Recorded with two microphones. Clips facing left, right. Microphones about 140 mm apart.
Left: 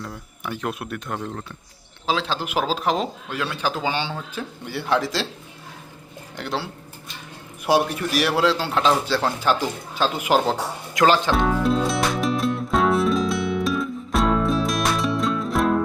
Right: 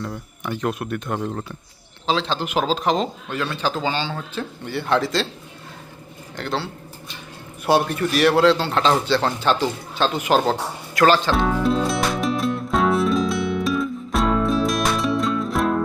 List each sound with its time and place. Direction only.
0.0 s speech: centre (ahead or behind)
2.0 s a man's voice: 5° left (ahead or behind)
6.3 s a man's voice: 10° left (ahead or behind)
7.7 s a man's voice: 10° left (ahead or behind)
11.3 s music: centre (ahead or behind)